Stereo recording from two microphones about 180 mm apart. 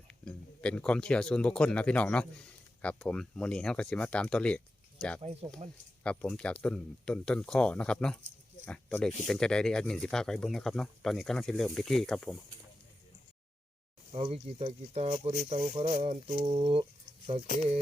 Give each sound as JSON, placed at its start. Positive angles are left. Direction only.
{"t": 0.3, "sound": "speech", "side_deg": 5}
{"t": 5.2, "sound": "speech", "side_deg": -35}
{"t": 6.0, "sound": "speech", "side_deg": 5}
{"t": 14.1, "sound": "speech", "side_deg": -35}